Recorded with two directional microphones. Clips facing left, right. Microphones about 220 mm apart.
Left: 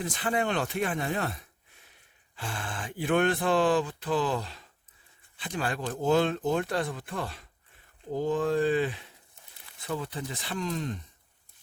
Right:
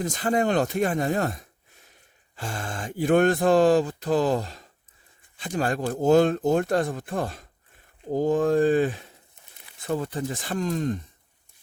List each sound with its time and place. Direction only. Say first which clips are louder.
0.0 s speech: right 5 dB; 40° right (ahead or behind)